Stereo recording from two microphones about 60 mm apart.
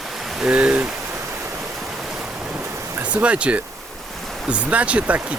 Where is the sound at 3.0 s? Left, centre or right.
Right.